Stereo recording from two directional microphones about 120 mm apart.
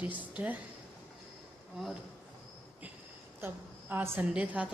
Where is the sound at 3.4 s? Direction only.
20° right (ahead or behind).